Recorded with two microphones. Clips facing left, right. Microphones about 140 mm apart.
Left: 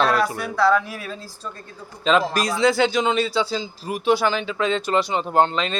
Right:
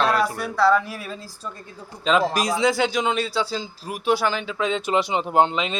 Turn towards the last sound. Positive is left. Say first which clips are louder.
# even
turn(degrees=-10)  # may be behind; listen again after turning